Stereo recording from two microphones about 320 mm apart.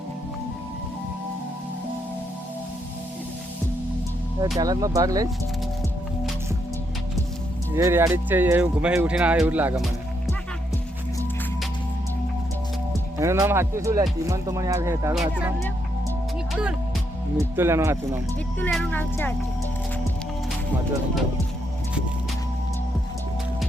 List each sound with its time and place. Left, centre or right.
4.5 s speech: centre
7.8 s speech: centre
12.9 s speech: centre
17.3 s speech: centre
18.6 s speech: centre